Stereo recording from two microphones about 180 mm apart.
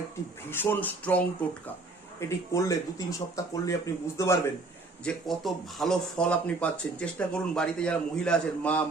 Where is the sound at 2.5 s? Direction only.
15° left (ahead or behind).